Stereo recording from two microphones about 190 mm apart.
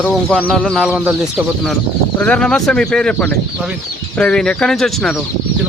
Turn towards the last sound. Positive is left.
turn(degrees=0)  # may be behind; listen again after turning